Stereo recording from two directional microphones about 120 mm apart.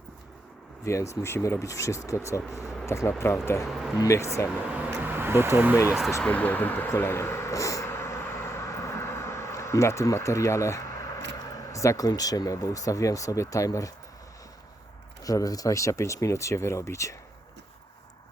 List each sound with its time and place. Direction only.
0.9 s speech: 25° left (ahead or behind)
3.7 s speech: centre (ahead or behind)
4.0 s speech: 25° left (ahead or behind)
4.9 s vehicle: 15° right (ahead or behind)
6.2 s speech: 10° left (ahead or behind)
15.2 s speech: 30° left (ahead or behind)